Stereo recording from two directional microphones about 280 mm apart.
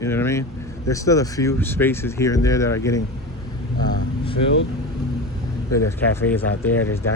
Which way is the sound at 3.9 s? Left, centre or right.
Centre.